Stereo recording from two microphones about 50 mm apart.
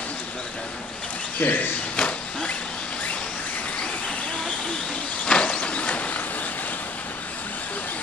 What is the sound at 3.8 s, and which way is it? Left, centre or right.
Vehicle, centre.